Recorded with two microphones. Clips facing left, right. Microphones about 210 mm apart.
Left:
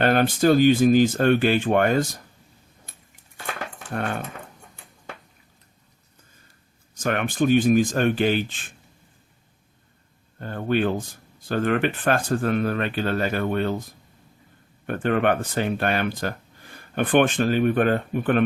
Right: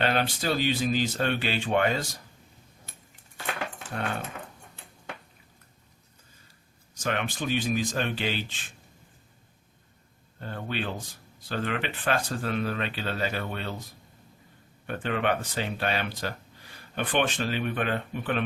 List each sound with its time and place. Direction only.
0.0 s speech: 50° left (ahead or behind)
6.9 s speech: 50° left (ahead or behind)
10.4 s speech: 50° left (ahead or behind)
14.8 s speech: 50° left (ahead or behind)